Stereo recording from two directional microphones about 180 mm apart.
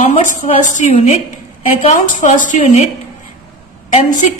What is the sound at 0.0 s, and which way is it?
A woman's voice, 45° left (ahead or behind).